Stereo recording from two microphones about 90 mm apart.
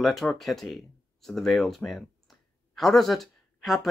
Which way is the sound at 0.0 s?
Centre (ahead or behind).